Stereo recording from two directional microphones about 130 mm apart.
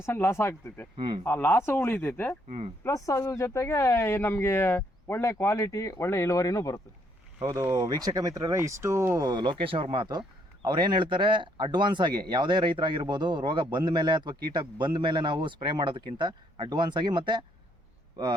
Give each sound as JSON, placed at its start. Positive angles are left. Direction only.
{"t": 0.0, "sound": "speech", "side_deg": 20}
{"t": 0.9, "sound": "speech", "side_deg": -40}
{"t": 1.2, "sound": "speech", "side_deg": 15}
{"t": 2.5, "sound": "speech", "side_deg": -60}
{"t": 2.8, "sound": "speech", "side_deg": 25}
{"t": 7.4, "sound": "speech", "side_deg": -25}